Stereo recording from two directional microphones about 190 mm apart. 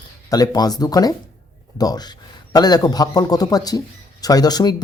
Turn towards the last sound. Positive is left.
turn(degrees=20)  # may be behind; listen again after turning